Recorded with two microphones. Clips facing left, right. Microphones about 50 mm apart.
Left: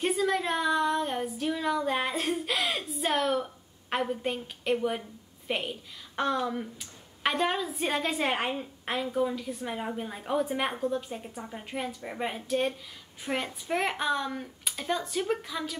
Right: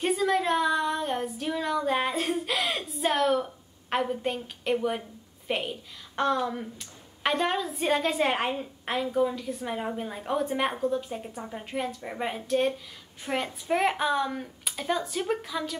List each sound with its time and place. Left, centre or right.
0.0 s female singing: centre
5.5 s speech: centre